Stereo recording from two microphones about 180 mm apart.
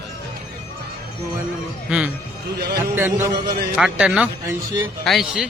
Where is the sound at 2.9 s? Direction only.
10° right (ahead or behind).